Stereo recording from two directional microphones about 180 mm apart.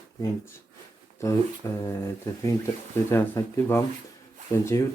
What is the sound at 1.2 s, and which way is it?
Speech, 15° left (ahead or behind).